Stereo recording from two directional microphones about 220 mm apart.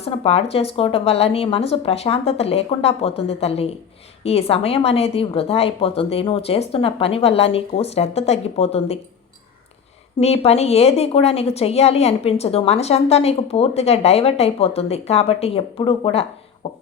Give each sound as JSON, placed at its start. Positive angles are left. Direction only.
{"t": 0.0, "sound": "a woman's voice", "side_deg": 25}
{"t": 10.2, "sound": "a woman's voice", "side_deg": 30}